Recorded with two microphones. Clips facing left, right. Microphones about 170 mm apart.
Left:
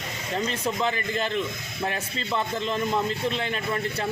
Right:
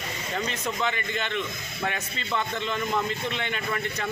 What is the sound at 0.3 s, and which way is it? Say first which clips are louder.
Speech: left 3 dB; 30° left (ahead or behind).